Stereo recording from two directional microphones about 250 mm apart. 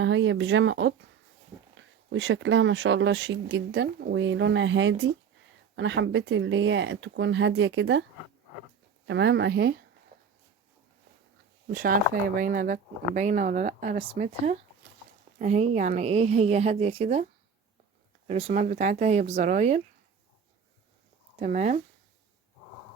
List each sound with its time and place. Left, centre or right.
0.0 s speech: right
9.0 s speech: right
11.7 s speech: right
18.3 s speech: right
21.3 s speech: right